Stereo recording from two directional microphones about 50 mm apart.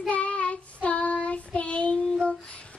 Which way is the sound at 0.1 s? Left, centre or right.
Left.